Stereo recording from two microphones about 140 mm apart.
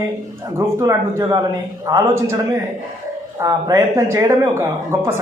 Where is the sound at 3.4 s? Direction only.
25° right (ahead or behind).